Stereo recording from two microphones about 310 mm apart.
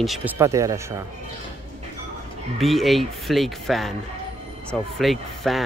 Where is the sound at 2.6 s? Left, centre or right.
Centre.